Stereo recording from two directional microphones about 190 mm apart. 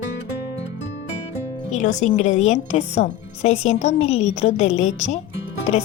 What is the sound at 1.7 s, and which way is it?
A woman's voice, 40° left (ahead or behind).